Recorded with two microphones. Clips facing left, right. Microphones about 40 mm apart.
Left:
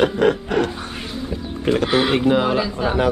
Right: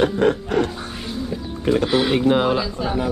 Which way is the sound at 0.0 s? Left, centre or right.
Left.